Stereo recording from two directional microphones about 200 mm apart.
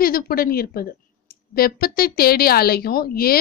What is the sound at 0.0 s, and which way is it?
A woman's voice, 50° left (ahead or behind).